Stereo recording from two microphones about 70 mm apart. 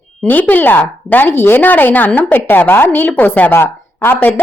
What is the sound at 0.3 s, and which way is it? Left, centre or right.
A woman's voice, left.